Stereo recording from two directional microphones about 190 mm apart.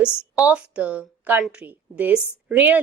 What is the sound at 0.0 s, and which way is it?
A woman's voice, 5° right (ahead or behind).